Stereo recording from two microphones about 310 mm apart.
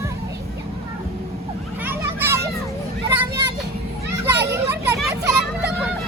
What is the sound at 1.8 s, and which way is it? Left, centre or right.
Children playing, centre.